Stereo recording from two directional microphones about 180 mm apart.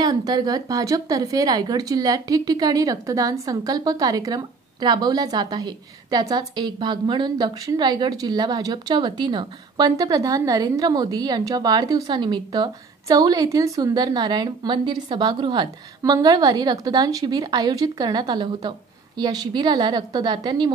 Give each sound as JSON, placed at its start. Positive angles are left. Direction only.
{"t": 0.0, "sound": "a woman's voice", "side_deg": -20}